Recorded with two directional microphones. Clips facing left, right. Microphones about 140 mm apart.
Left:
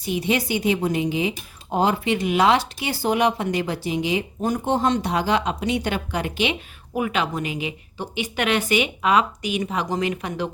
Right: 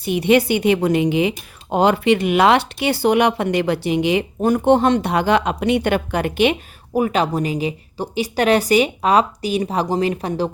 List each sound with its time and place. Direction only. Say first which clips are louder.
0.0 s speech: right 8 dB; 60° right (ahead or behind)
6.9 s a woman's voice: right 6 dB; 40° right (ahead or behind)